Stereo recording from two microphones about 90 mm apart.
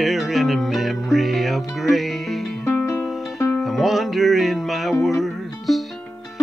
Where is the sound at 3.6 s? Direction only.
Centre (ahead or behind).